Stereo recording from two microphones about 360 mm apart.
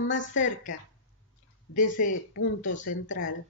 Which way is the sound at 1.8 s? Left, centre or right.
Left.